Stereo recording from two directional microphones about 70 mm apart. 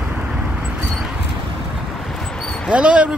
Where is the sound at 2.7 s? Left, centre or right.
Centre.